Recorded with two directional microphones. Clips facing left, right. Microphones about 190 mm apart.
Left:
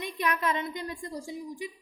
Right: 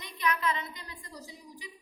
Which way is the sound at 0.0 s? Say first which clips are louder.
Left 2 dB; 50° left (ahead or behind).